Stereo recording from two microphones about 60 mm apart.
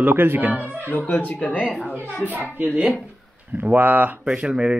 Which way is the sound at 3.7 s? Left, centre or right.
Right.